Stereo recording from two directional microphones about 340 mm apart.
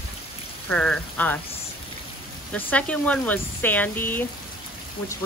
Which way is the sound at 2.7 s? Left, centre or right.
Centre.